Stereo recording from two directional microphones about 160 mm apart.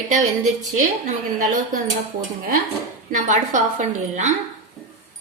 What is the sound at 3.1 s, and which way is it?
A woman's voice, 50° right (ahead or behind).